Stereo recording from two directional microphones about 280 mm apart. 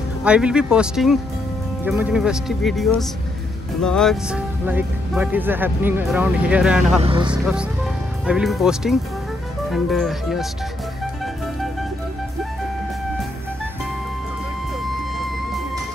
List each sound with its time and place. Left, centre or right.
0.2 s speech: centre
7.0 s speech: centre
8.3 s speech: centre